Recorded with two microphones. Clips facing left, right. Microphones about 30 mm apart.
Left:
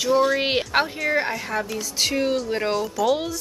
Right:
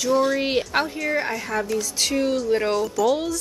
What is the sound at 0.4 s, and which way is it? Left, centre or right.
Speech, left.